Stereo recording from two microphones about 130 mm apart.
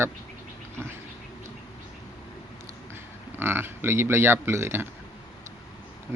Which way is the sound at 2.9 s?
20° right (ahead or behind).